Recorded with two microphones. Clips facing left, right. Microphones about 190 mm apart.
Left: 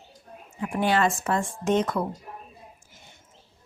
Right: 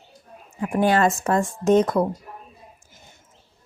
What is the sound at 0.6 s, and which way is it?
Speech, 45° right (ahead or behind).